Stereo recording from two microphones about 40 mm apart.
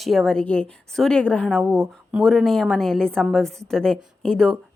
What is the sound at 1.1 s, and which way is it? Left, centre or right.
Speech, left.